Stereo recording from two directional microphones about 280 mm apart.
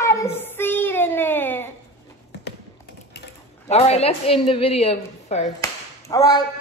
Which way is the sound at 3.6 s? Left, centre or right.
Left.